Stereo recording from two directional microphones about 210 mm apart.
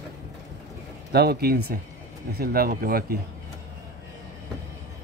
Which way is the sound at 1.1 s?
50° right (ahead or behind).